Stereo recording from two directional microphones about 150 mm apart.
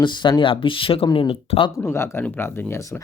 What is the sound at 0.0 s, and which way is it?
Speech, 30° left (ahead or behind).